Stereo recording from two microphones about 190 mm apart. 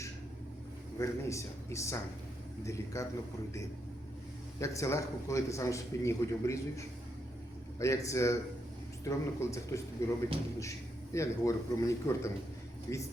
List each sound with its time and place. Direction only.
0.9 s a man's voice: 15° left (ahead or behind)
4.6 s a man's voice: 15° left (ahead or behind)